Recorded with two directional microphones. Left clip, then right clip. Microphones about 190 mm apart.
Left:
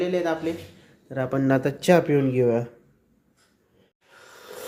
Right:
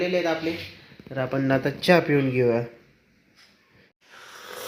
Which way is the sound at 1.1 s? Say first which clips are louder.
Left 1 dB; 20° left (ahead or behind).